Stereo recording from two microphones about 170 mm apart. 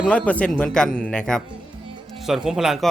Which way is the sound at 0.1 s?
5° left (ahead or behind).